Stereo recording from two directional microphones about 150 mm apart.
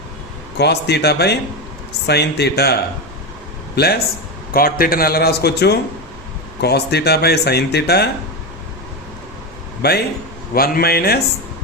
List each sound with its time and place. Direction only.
0.6 s speech: 90° left
3.8 s speech: 90° left
4.5 s speech: 75° left (ahead or behind); by 8.0 s 90° left
9.8 s speech: 90° left